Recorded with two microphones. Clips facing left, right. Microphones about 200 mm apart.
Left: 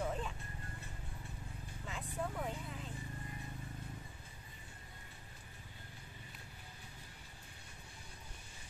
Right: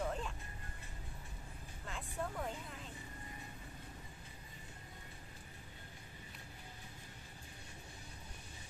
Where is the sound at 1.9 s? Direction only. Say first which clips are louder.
Left 1 dB; centre (ahead or behind).